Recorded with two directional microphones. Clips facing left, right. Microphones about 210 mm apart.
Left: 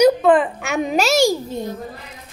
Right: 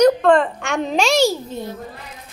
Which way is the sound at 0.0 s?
5° left (ahead or behind).